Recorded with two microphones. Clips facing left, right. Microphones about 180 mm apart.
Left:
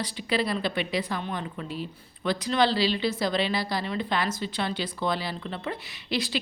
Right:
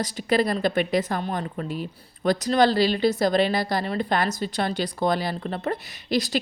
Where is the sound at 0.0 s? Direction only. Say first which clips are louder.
Right 5 dB; 45° right (ahead or behind).